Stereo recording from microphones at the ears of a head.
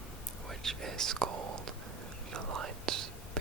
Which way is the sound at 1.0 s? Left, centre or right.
Right.